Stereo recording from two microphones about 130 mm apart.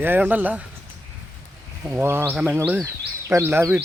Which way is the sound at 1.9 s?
20° right (ahead or behind).